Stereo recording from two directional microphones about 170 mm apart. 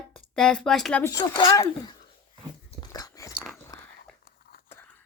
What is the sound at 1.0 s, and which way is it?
Speech, 20° left (ahead or behind).